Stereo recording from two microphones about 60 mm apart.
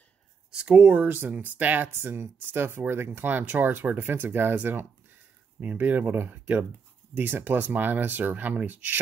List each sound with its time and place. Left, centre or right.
0.5 s speech: centre